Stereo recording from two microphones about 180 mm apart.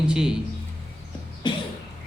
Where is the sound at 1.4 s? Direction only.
25° left (ahead or behind).